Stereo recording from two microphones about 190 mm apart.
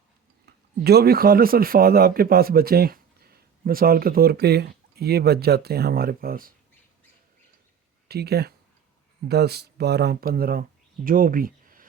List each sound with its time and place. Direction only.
0.4 s speech: 55° right (ahead or behind)
8.0 s speech: 55° right (ahead or behind)